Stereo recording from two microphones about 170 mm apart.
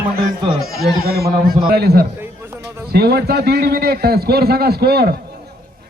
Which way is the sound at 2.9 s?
65° right (ahead or behind).